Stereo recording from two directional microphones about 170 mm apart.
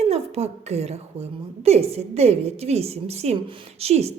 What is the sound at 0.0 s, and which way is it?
A woman's voice, 35° right (ahead or behind).